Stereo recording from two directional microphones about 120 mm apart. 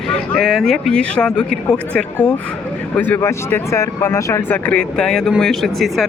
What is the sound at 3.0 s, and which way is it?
Speech, 20° left (ahead or behind).